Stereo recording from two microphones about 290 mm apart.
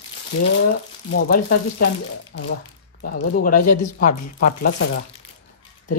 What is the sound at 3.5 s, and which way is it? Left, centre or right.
Speech, left.